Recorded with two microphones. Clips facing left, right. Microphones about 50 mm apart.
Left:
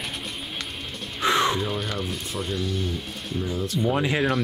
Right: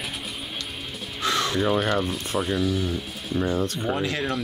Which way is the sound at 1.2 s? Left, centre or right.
Left.